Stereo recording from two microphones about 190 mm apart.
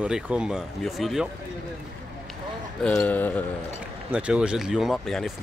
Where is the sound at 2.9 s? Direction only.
10° left (ahead or behind).